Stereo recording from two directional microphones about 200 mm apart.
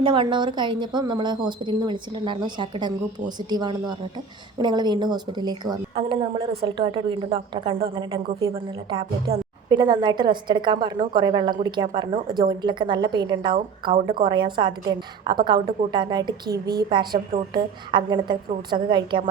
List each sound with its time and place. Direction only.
0.0 s a woman's voice: 25° right (ahead or behind)